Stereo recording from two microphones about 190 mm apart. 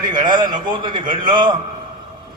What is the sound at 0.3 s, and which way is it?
A man's voice, 25° right (ahead or behind).